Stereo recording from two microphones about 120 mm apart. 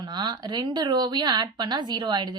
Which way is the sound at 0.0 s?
40° right (ahead or behind).